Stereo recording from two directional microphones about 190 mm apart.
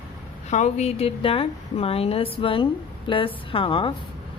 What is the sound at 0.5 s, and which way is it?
A woman's voice, 35° left (ahead or behind).